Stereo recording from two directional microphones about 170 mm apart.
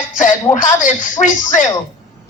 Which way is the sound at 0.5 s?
50° left (ahead or behind).